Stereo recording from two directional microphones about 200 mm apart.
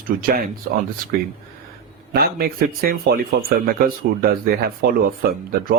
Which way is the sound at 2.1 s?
50° right (ahead or behind).